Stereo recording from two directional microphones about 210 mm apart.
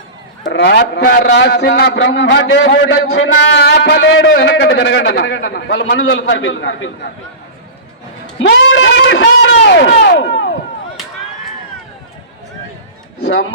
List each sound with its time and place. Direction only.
0.4 s a man's voice: 55° left (ahead or behind)
8.4 s a sound: 65° left (ahead or behind)
13.1 s speech: 55° left (ahead or behind)